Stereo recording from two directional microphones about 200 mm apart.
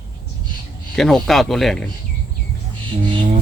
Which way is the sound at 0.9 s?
Centre (ahead or behind).